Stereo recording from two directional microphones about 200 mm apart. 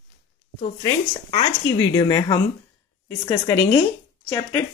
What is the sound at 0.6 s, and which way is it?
Speech, 30° left (ahead or behind).